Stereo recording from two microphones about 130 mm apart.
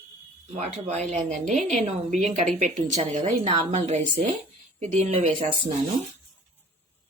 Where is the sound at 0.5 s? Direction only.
60° right (ahead or behind).